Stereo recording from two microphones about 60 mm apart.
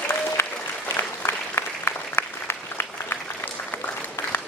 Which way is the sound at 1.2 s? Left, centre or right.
Left.